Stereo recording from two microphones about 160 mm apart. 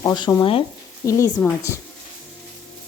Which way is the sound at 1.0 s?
20° left (ahead or behind).